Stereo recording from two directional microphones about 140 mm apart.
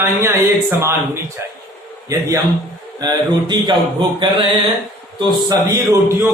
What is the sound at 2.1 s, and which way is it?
Speech, 25° right (ahead or behind).